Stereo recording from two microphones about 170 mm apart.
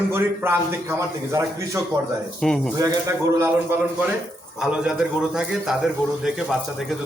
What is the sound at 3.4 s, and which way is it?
A man's voice, 10° right (ahead or behind).